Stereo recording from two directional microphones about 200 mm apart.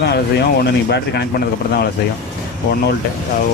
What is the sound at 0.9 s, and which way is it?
Speech, 60° left (ahead or behind).